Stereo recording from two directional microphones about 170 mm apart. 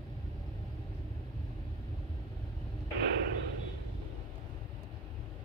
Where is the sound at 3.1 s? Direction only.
75° right (ahead or behind).